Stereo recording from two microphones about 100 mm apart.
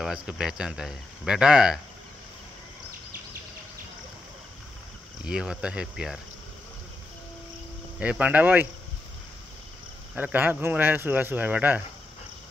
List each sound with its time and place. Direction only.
0.0 s speech: 5° right (ahead or behind)
5.2 s speech: 5° right (ahead or behind)
8.0 s speech: 15° right (ahead or behind)
10.1 s speech: 15° right (ahead or behind)